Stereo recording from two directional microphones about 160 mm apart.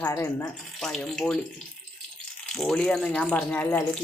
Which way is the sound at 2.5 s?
5° left (ahead or behind).